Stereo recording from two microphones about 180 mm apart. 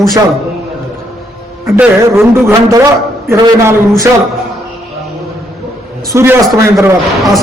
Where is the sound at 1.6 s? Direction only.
10° right (ahead or behind).